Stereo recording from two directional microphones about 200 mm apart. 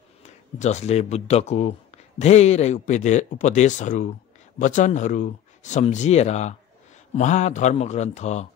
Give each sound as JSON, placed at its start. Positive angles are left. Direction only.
{"t": 0.2, "sound": "speech", "side_deg": 35}